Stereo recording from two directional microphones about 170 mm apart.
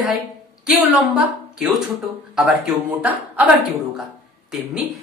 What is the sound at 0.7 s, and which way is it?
Speech, 5° right (ahead or behind).